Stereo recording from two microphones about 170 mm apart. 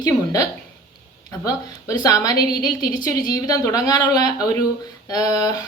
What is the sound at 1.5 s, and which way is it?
A woman's voice, 20° left (ahead or behind).